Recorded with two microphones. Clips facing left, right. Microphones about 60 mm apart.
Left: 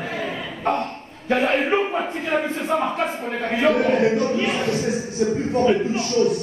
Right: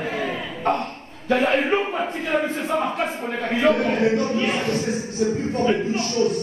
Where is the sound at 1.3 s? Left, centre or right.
Centre.